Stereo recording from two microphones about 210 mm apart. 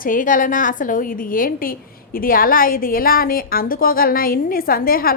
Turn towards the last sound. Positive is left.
turn(degrees=45)  # may be behind; listen again after turning